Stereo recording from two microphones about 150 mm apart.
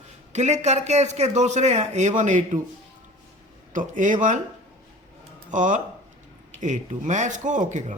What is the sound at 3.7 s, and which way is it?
Speech, 60° right (ahead or behind).